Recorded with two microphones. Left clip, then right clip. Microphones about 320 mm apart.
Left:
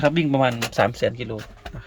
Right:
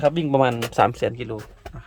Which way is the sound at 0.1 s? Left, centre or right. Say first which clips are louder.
Right 1 dB; centre.